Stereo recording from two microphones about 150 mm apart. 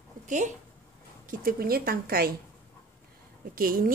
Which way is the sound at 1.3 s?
75° right (ahead or behind).